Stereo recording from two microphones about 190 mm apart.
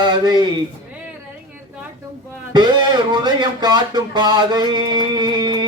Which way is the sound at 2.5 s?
25° right (ahead or behind).